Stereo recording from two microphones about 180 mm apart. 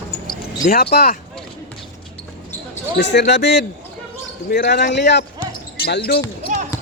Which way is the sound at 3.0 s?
75° left (ahead or behind).